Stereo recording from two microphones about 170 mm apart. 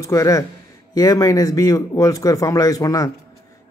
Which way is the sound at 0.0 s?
20° left (ahead or behind).